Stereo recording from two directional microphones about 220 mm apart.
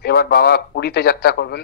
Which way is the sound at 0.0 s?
45° left (ahead or behind).